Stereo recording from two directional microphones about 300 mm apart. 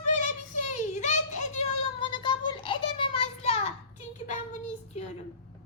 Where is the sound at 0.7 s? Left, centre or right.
Left.